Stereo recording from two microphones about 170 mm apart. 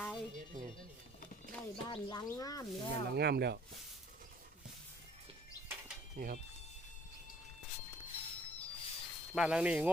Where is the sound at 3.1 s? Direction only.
70° right (ahead or behind).